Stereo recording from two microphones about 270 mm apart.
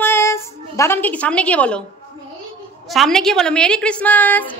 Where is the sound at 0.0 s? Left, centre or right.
Centre.